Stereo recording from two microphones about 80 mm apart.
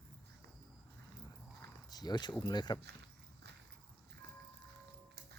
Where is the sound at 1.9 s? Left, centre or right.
Left.